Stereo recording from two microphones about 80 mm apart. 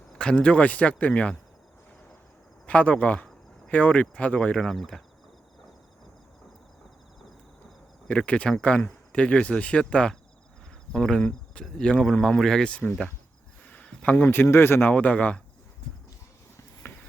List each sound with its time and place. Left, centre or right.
0.2 s speech: centre
2.6 s speech: centre
8.0 s speech: centre
13.7 s a sound: centre
14.4 s speech: left
14.9 s speech: centre
16.8 s a sound: left